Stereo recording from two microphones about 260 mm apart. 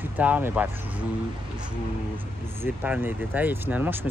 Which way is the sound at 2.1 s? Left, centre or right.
Centre.